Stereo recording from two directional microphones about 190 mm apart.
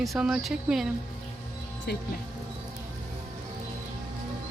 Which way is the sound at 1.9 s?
60° left (ahead or behind).